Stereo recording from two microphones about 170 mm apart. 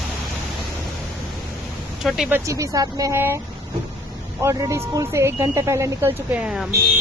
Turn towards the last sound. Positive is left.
turn(degrees=-5)  # may be behind; listen again after turning